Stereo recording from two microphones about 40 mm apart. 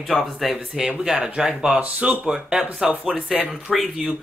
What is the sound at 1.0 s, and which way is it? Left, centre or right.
Speech, centre.